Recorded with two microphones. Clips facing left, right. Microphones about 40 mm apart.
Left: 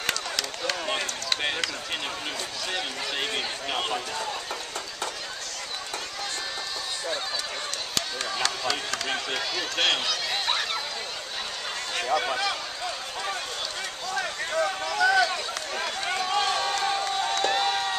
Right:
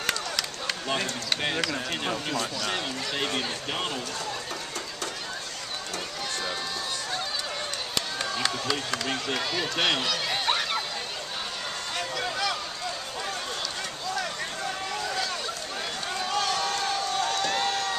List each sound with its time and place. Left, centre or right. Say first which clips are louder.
0.0 s run: even; centre
0.9 s speech: even; centre
7.9 s run: even; centre
9.0 s speech: even; centre
12.0 s a sound: left 7 dB; centre
14.9 s run: left 12 dB; left
16.3 s a sound: left 1 dB; centre